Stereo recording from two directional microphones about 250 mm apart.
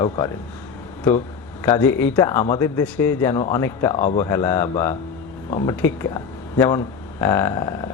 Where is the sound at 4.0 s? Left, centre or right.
Left.